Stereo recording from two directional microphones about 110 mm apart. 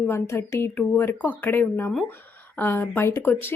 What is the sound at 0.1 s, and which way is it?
Speech, 25° left (ahead or behind).